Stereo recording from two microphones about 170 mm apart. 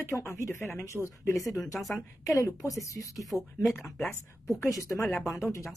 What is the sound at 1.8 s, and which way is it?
Speech, centre (ahead or behind).